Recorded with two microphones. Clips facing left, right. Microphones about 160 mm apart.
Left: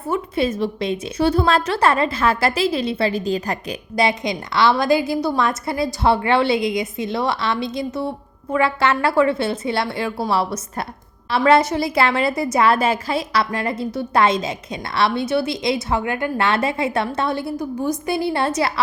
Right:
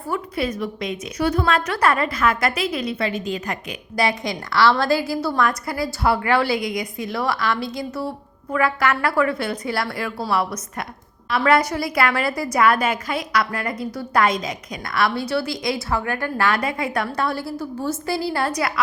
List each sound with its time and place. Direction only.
0.1 s a woman's voice: 25° left (ahead or behind)
3.9 s a woman's voice: 20° left (ahead or behind)